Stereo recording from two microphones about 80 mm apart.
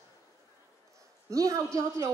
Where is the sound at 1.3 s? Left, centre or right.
Right.